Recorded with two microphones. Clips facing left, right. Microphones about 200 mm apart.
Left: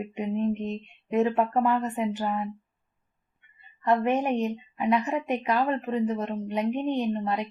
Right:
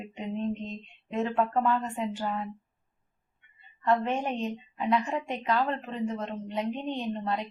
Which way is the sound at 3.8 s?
15° left (ahead or behind).